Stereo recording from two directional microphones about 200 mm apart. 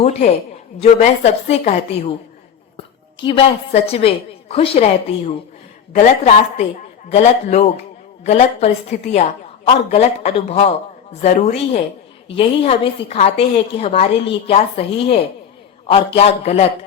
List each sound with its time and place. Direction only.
0.0 s a woman's voice: 30° left (ahead or behind)